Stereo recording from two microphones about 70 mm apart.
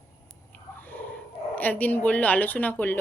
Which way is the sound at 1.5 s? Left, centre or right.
Left.